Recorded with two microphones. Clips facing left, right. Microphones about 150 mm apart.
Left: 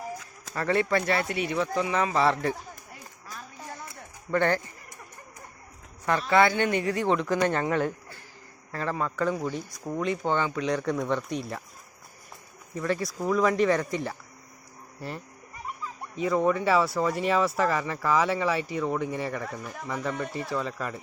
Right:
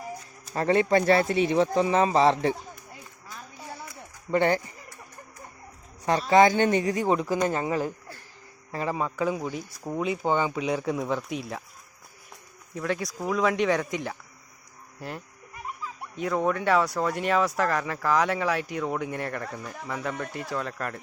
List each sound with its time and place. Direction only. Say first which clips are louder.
0.5 s speech: right 3 dB; 25° right (ahead or behind)
4.3 s speech: right 2 dB; 15° right (ahead or behind)
6.1 s speech: right 3 dB; 35° right (ahead or behind)
6.8 s speech: right 1 dB; 15° right (ahead or behind)
12.7 s speech: left 1 dB; centre (ahead or behind)
15.6 s speech: even; centre (ahead or behind)